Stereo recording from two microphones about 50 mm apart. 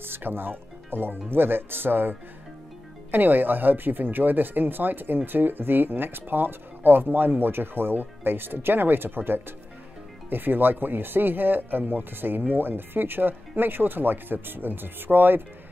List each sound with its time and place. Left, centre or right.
0.0 s speech: right